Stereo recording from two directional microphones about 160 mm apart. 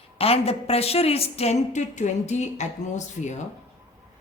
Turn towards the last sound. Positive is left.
turn(degrees=45)  # may be behind; listen again after turning